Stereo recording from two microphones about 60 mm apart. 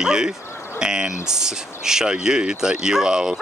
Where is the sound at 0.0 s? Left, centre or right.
Centre.